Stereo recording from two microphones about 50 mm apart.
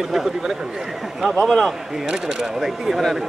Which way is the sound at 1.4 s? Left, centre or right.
Centre.